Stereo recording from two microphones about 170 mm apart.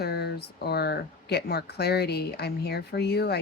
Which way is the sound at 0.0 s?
70° left (ahead or behind).